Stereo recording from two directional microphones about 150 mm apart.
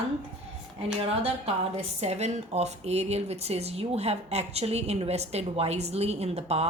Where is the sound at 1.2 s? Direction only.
45° right (ahead or behind).